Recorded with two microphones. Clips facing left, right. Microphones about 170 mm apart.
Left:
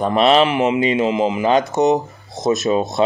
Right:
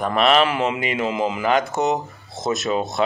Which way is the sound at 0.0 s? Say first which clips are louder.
Left 4 dB; 25° left (ahead or behind).